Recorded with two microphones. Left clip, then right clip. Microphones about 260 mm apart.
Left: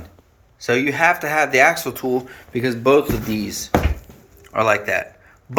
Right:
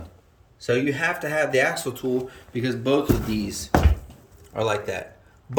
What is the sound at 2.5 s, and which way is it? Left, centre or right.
Speech, centre.